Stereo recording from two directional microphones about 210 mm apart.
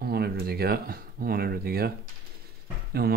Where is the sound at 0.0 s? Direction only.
50° right (ahead or behind).